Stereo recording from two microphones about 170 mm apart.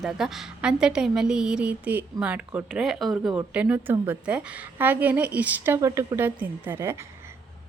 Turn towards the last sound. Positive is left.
turn(degrees=-15)  # may be behind; listen again after turning